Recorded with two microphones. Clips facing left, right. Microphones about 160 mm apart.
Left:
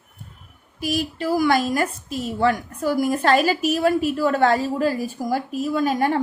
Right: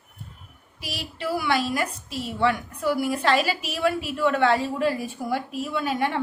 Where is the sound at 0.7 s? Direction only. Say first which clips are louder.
Left 10 dB; 45° left (ahead or behind).